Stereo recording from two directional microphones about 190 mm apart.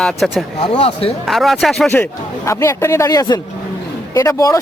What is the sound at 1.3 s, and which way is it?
A man's voice, centre (ahead or behind).